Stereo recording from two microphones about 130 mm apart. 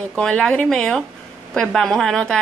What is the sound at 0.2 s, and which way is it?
A woman's voice, 5° left (ahead or behind).